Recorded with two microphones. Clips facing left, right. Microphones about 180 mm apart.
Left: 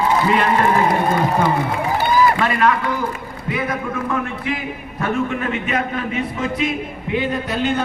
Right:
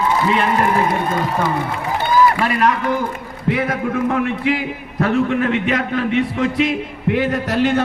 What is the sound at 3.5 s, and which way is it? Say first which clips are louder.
A man's voice: right 4 dB; 70° right (ahead or behind).